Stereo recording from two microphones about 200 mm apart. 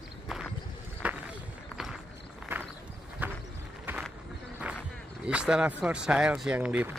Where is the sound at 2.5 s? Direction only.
10° right (ahead or behind).